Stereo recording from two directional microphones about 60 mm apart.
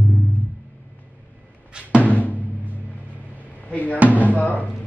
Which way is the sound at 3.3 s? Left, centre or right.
Left.